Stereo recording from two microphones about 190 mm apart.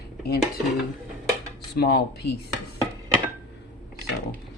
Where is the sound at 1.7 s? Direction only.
55° left (ahead or behind).